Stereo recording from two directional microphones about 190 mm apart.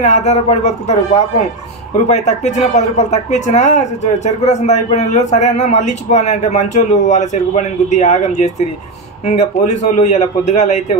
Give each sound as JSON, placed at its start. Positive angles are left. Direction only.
{"t": 0.0, "sound": "speech", "side_deg": 35}